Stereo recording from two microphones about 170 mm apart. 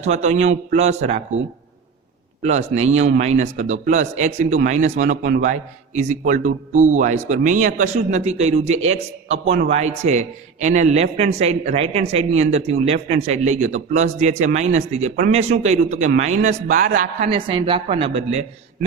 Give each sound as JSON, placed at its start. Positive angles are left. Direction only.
{"t": 0.0, "sound": "a man's voice", "side_deg": -40}
{"t": 2.4, "sound": "a man's voice", "side_deg": -40}
{"t": 17.2, "sound": "a man's voice", "side_deg": -30}